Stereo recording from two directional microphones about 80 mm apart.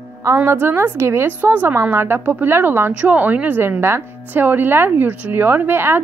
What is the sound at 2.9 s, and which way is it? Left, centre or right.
A woman's voice, centre.